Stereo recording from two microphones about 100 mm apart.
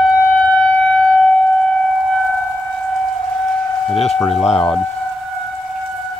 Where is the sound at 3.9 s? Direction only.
90° left.